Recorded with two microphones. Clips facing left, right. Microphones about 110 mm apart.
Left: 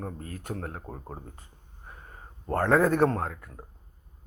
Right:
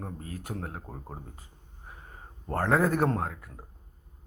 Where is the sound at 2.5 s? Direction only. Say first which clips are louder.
Left 3 dB; 5° right (ahead or behind).